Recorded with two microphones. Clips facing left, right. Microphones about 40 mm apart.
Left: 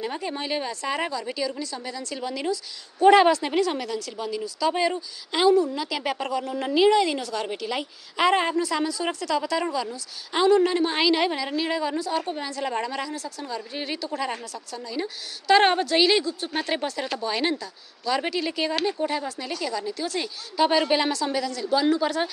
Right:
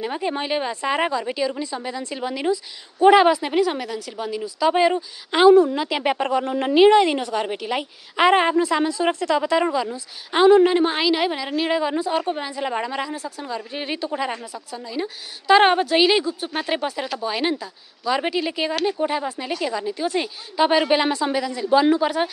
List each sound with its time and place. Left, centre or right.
0.0 s a woman's voice: right
11.0 s a woman's voice: centre
11.5 s a woman's voice: right